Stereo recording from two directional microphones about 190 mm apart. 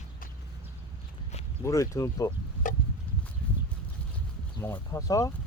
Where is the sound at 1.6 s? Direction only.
15° left (ahead or behind).